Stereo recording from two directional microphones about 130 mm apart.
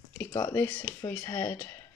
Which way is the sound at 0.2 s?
25° left (ahead or behind).